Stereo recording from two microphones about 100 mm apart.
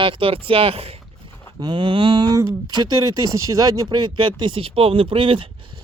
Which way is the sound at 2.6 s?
45° right (ahead or behind).